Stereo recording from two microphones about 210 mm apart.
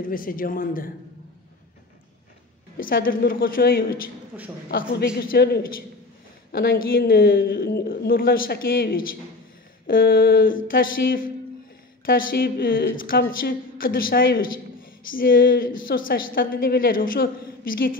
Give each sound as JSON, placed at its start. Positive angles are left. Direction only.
{"t": 0.0, "sound": "speech", "side_deg": 40}
{"t": 2.8, "sound": "a woman's voice", "side_deg": 40}
{"t": 4.3, "sound": "a woman's voice", "side_deg": -5}
{"t": 4.6, "sound": "a woman's voice", "side_deg": 45}